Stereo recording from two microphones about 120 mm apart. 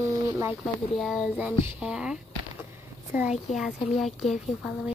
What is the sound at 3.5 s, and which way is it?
A child's voice, centre (ahead or behind).